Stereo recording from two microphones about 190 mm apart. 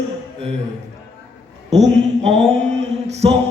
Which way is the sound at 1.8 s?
35° right (ahead or behind).